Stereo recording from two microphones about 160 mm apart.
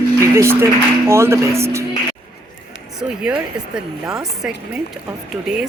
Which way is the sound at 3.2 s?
5° right (ahead or behind).